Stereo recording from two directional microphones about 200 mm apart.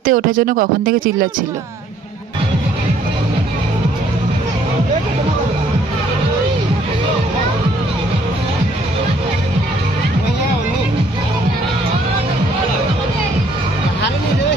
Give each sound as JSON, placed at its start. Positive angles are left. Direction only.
{"t": 0.0, "sound": "speech", "side_deg": -45}